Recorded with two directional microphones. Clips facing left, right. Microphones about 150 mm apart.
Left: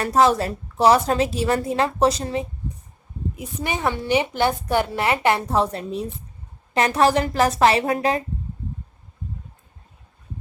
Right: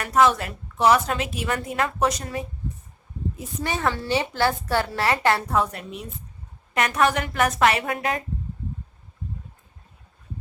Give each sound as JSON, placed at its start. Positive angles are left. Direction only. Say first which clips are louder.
{"t": 0.0, "sound": "a woman's voice", "louder": "left 2 dB", "side_deg": 35}
{"t": 3.3, "sound": "a woman's voice", "louder": "left 1 dB", "side_deg": 15}